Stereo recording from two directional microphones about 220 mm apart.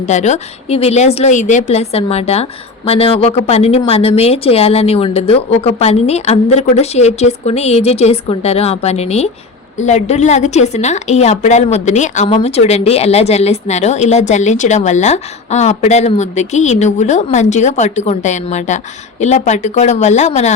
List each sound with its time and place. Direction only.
0.1 s a woman's voice: 30° left (ahead or behind)